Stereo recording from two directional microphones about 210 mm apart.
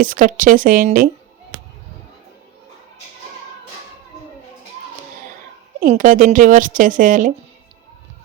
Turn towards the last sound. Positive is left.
turn(degrees=-40)  # may be behind; listen again after turning